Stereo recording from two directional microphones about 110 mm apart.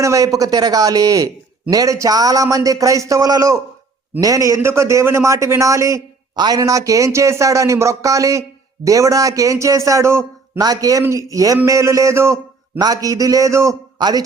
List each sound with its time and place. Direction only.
0.0 s a man's voice: 30° right (ahead or behind)